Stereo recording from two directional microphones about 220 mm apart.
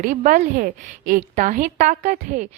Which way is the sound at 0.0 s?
35° right (ahead or behind).